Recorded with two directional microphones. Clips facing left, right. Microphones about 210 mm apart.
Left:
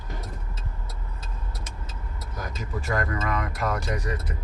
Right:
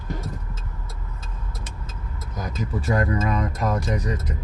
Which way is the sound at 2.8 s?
20° right (ahead or behind).